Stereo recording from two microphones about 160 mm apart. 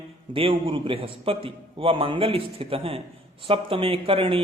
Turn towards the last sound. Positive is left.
turn(degrees=-35)  # may be behind; listen again after turning